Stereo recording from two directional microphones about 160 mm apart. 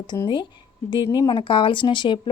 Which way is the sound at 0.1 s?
20° left (ahead or behind).